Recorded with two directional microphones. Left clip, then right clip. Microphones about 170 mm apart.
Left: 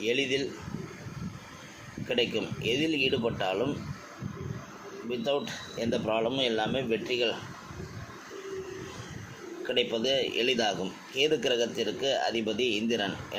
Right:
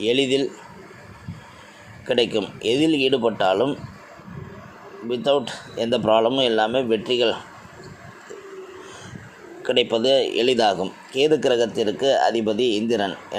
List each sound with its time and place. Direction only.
0.0 s speech: 50° right (ahead or behind)
2.0 s speech: 55° right (ahead or behind)
5.0 s speech: 50° right (ahead or behind)
9.6 s speech: 50° right (ahead or behind)